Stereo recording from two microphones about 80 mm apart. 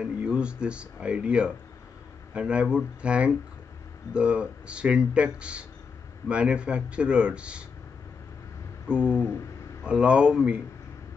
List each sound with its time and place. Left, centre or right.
0.0 s speech: centre
8.9 s speech: left
9.8 s speech: centre